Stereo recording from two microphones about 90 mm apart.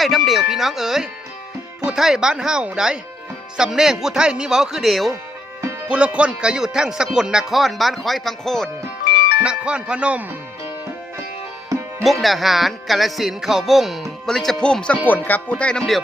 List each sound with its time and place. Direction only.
0.0 s music: centre (ahead or behind)
1.8 s speech: 5° right (ahead or behind)
3.6 s music: 5° right (ahead or behind)
5.9 s music: 15° right (ahead or behind); by 8.7 s 5° left (ahead or behind)
9.4 s speech: 10° right (ahead or behind)
12.0 s music: centre (ahead or behind)
15.0 s speech: 20° left (ahead or behind)